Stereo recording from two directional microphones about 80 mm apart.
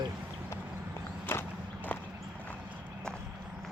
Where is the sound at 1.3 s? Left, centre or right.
Left.